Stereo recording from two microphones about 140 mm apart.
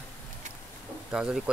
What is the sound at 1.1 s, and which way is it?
Speech, 5° right (ahead or behind).